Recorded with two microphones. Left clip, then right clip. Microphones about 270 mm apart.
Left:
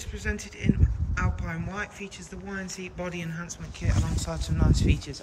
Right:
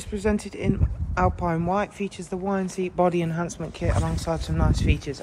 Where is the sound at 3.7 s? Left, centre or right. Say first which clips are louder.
Right 8 dB; centre.